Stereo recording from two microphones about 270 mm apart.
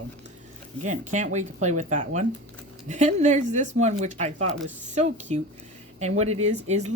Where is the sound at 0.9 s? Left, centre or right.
Right.